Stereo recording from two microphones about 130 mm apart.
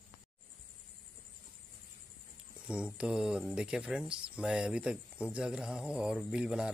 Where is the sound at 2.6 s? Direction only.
10° right (ahead or behind).